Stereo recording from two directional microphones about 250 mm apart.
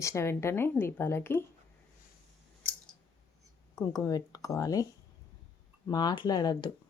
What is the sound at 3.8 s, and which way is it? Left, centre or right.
A woman's voice, centre.